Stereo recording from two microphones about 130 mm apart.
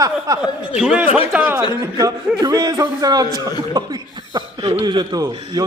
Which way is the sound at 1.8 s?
25° right (ahead or behind).